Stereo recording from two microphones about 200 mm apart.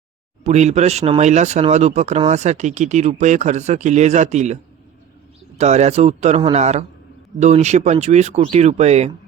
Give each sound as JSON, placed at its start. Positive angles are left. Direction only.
{"t": 0.4, "sound": "speech", "side_deg": -35}
{"t": 5.5, "sound": "speech", "side_deg": -35}